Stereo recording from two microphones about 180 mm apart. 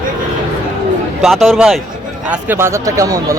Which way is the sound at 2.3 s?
10° right (ahead or behind).